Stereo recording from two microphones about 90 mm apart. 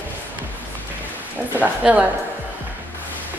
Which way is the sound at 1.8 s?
10° right (ahead or behind).